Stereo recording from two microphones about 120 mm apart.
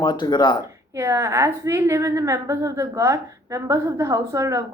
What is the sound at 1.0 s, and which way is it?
A woman's voice, 25° right (ahead or behind).